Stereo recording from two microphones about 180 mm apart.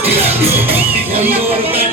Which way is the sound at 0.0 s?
35° right (ahead or behind).